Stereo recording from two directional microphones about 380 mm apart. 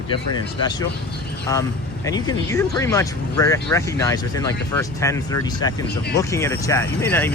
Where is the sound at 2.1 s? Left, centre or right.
Centre.